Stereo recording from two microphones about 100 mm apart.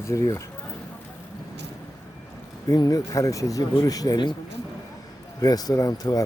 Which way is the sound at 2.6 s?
40° left (ahead or behind).